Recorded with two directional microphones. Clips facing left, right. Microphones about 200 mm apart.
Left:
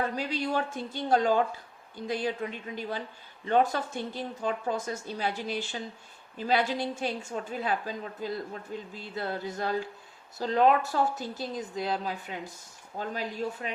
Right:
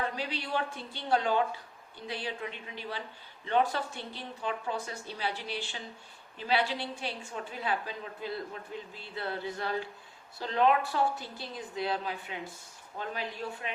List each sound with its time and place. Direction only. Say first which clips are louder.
0.2 s a man's voice: left 4 dB; 45° left (ahead or behind)